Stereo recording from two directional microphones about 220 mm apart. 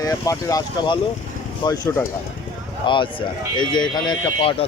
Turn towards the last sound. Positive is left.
turn(degrees=20)  # may be behind; listen again after turning